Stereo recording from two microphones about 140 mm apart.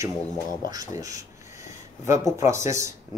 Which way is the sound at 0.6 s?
30° right (ahead or behind).